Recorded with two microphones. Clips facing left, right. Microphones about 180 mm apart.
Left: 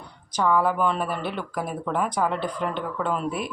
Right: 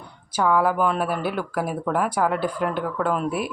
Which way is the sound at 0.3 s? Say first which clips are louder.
Right 2 dB; 5° right (ahead or behind).